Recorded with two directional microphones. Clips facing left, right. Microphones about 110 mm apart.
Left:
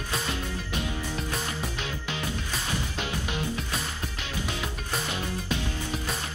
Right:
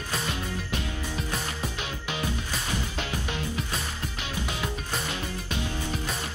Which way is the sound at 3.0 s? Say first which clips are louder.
Left 1 dB; 20° left (ahead or behind).